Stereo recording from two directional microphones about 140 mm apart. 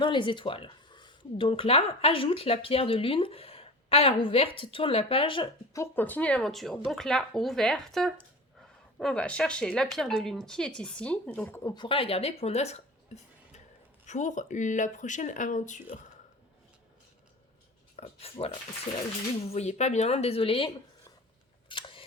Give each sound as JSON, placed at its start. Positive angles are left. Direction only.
{"t": 0.0, "sound": "speech", "side_deg": 35}
{"t": 5.7, "sound": "speech", "side_deg": 15}
{"t": 11.6, "sound": "speech", "side_deg": 30}
{"t": 14.1, "sound": "speech", "side_deg": 60}
{"t": 17.9, "sound": "speech", "side_deg": 45}
{"t": 21.7, "sound": "camera", "side_deg": 35}